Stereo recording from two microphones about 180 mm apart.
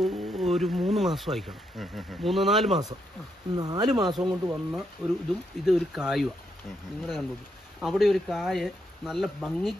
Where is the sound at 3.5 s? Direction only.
20° right (ahead or behind).